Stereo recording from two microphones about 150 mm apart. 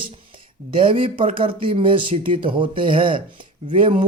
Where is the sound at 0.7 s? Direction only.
35° right (ahead or behind).